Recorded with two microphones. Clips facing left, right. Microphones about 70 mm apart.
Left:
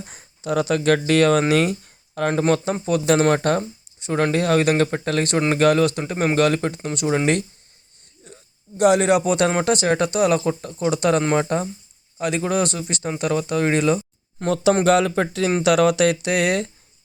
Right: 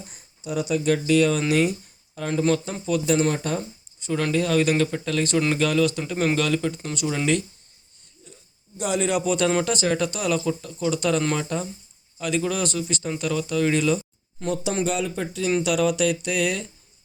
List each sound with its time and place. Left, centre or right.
0.1 s speech: left
2.4 s speech: left
3.1 s speech: left
4.0 s speech: left
6.0 s speech: left
8.3 s a sound: left
8.8 s speech: left
9.2 s speech: left
10.9 s speech: left
11.2 s speech: left
11.4 s a man's voice: left
14.8 s speech: left
15.6 s speech: left